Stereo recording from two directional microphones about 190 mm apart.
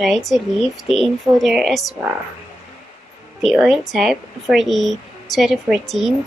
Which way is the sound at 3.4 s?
Centre (ahead or behind).